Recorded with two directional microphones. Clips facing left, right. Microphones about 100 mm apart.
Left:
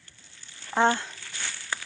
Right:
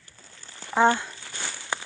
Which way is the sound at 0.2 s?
40° right (ahead or behind).